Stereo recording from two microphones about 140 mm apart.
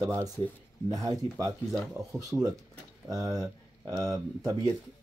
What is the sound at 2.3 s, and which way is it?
Speech, centre (ahead or behind).